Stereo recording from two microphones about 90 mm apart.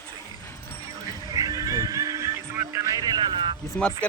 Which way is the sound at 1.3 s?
40° right (ahead or behind).